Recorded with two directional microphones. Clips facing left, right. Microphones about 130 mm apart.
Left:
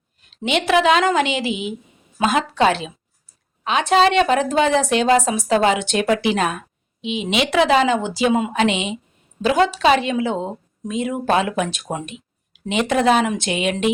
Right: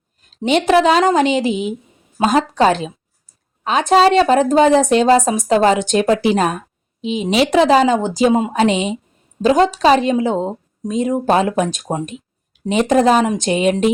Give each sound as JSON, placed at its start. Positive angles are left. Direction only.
{"t": 0.2, "sound": "speech", "side_deg": -40}